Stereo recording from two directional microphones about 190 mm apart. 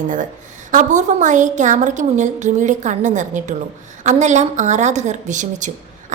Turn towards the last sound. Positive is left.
turn(degrees=-40)  # may be behind; listen again after turning